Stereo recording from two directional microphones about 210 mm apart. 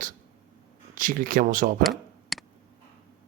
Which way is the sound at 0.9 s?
40° right (ahead or behind).